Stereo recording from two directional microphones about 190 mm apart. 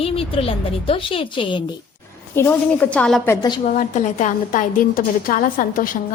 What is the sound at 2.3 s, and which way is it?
A woman's voice, 10° left (ahead or behind).